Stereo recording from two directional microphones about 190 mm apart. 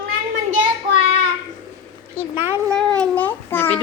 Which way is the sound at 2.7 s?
5° left (ahead or behind).